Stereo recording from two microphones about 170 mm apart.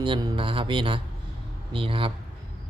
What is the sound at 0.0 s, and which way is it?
Speech, 30° right (ahead or behind).